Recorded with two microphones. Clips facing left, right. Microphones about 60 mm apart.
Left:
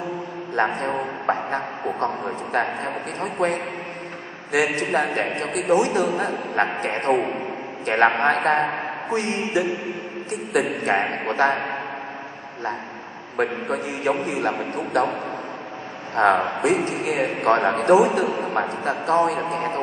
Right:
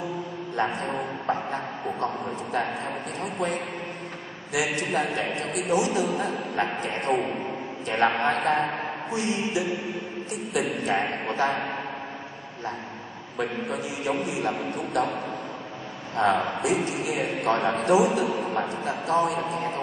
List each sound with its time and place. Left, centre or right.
0.7 s a man's voice: left
4.8 s a man's voice: left
8.6 s a woman's voice: left
9.1 s a woman's voice: left
11.2 s a man's voice: left
11.5 s a man's voice: left
13.7 s a man's voice: left
15.0 s a man's voice: left
16.2 s a man's voice: left